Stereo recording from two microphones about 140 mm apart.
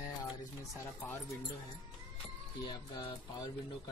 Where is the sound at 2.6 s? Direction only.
35° left (ahead or behind).